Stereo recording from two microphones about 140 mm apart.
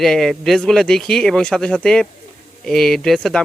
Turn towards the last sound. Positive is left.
turn(degrees=0)  # may be behind; listen again after turning